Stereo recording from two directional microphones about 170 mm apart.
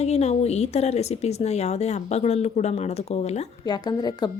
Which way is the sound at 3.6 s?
25° left (ahead or behind).